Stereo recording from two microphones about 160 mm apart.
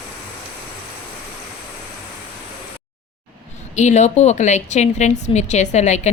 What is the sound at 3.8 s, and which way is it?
A woman's voice, 45° left (ahead or behind).